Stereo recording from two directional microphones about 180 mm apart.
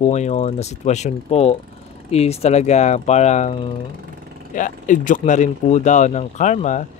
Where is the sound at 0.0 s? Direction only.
40° left (ahead or behind).